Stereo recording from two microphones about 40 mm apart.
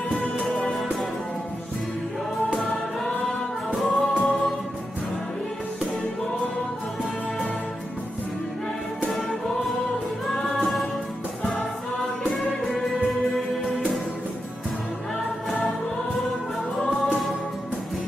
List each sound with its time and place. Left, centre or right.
0.1 s music: left
2.5 s music: centre
9.0 s music: centre
12.4 s music: centre
16.8 s music: centre